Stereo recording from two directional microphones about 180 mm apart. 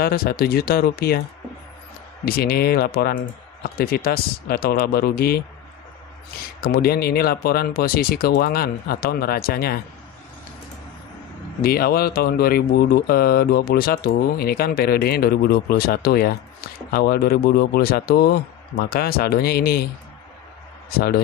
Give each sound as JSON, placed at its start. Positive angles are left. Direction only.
{"t": 0.0, "sound": "speech", "side_deg": 60}
{"t": 2.2, "sound": "speech", "side_deg": 55}
{"t": 6.6, "sound": "speech", "side_deg": 55}
{"t": 11.6, "sound": "speech", "side_deg": 55}